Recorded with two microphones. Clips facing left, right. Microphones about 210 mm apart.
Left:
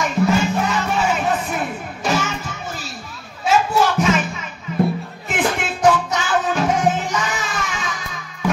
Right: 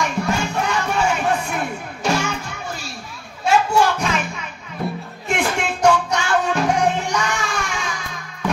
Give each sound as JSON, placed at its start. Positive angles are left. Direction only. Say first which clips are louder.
{"t": 0.0, "sound": "music", "louder": "left 4 dB", "side_deg": 0}
{"t": 3.4, "sound": "a sound", "louder": "even", "side_deg": 0}
{"t": 5.3, "sound": "music", "louder": "even", "side_deg": 0}